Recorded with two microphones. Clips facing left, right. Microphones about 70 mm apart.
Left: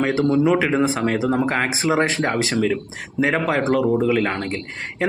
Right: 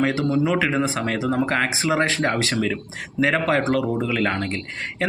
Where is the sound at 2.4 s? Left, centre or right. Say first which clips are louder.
Left 3 dB; centre.